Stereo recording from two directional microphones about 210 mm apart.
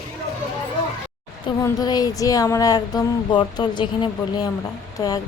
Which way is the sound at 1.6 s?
20° left (ahead or behind).